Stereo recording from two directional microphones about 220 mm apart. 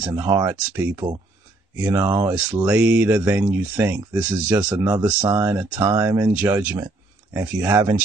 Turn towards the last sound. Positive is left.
turn(degrees=-15)  # may be behind; listen again after turning